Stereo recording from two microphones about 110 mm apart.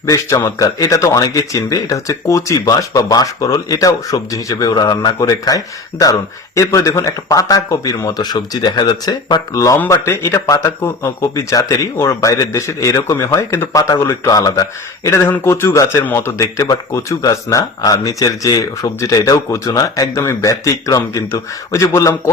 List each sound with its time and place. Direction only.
0.0 s speech: 30° left (ahead or behind)